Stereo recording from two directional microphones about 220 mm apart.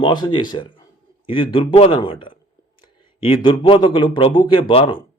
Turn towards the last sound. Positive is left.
turn(degrees=25)  # may be behind; listen again after turning